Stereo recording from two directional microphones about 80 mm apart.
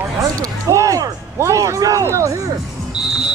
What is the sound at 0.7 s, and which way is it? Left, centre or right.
A man's voice, right.